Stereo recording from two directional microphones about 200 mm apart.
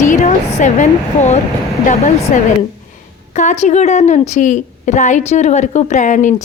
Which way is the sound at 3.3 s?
35° left (ahead or behind).